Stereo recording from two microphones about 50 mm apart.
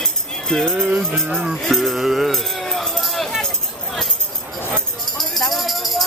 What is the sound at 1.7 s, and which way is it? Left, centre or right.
Speech, centre.